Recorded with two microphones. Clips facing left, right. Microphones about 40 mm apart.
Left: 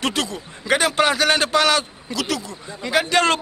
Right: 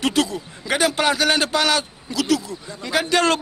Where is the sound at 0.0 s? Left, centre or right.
Centre.